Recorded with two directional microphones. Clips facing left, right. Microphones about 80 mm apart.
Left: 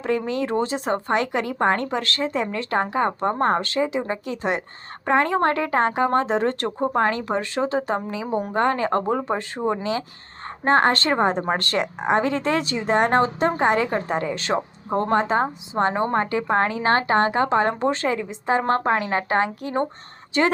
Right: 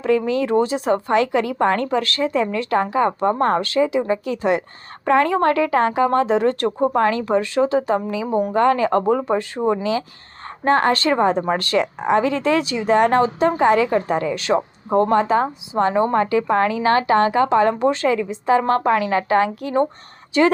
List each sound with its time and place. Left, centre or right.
0.3 s a woman's voice: left
11.8 s a woman's voice: left